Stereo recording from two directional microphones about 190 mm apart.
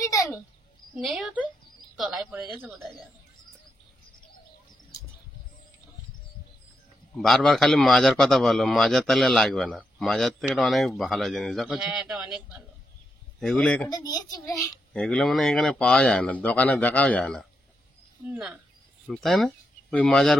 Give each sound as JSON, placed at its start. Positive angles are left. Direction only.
{"t": 0.0, "sound": "a sound", "side_deg": 15}
{"t": 0.9, "sound": "a man's voice", "side_deg": 0}
{"t": 7.2, "sound": "a man's voice", "side_deg": 0}
{"t": 13.8, "sound": "a child's voice", "side_deg": 20}
{"t": 14.9, "sound": "a man's voice", "side_deg": 5}